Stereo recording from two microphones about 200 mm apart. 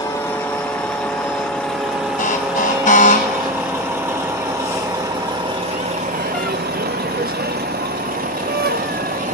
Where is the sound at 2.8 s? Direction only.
40° left (ahead or behind).